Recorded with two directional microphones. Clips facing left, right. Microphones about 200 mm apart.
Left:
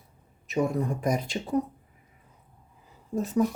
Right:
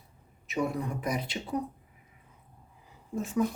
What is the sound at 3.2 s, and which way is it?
Speech, 40° left (ahead or behind).